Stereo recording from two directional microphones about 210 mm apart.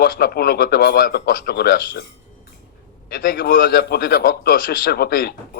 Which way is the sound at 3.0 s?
45° left (ahead or behind).